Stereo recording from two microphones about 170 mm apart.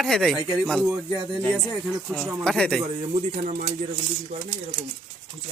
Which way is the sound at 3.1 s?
35° right (ahead or behind).